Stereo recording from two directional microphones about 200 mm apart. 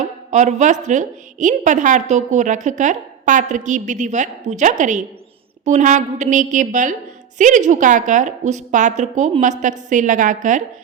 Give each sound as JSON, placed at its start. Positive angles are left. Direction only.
{"t": 0.0, "sound": "a woman's voice", "side_deg": -40}